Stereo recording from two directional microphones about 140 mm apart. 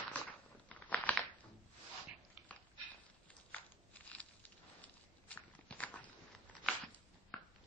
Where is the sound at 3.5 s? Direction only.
10° left (ahead or behind).